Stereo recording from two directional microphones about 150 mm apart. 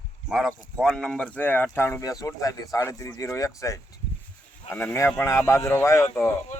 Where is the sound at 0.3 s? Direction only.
Centre (ahead or behind).